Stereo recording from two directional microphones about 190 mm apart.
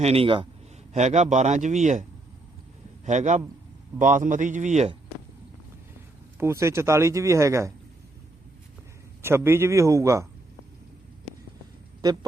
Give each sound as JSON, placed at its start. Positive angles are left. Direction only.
{"t": 0.0, "sound": "a man's voice", "side_deg": -30}
{"t": 3.1, "sound": "speech", "side_deg": -40}
{"t": 6.4, "sound": "speech", "side_deg": -15}
{"t": 9.2, "sound": "speech", "side_deg": -10}